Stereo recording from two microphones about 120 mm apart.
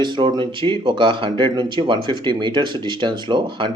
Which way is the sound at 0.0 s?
40° right (ahead or behind).